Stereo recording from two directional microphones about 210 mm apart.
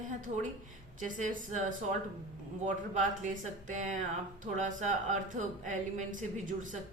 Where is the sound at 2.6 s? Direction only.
35° right (ahead or behind).